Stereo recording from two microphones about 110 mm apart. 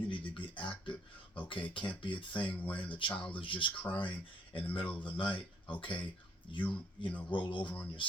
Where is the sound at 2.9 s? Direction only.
50° left (ahead or behind).